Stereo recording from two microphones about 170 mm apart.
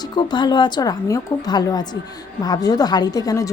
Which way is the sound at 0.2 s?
25° left (ahead or behind).